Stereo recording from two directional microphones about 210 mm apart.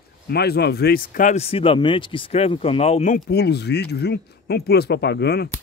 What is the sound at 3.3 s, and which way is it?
Speech, 50° left (ahead or behind).